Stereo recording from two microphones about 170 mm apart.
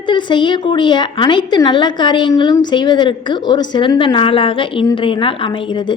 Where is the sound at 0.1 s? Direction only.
30° left (ahead or behind).